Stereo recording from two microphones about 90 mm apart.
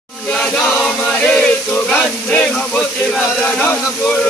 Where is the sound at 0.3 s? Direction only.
10° left (ahead or behind).